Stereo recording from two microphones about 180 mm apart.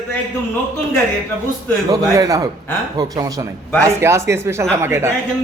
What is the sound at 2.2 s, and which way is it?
A man's voice, 20° right (ahead or behind).